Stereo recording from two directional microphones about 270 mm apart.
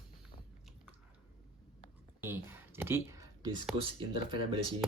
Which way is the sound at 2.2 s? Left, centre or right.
Centre.